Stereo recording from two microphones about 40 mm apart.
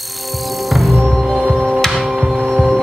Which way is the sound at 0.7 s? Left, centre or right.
Centre.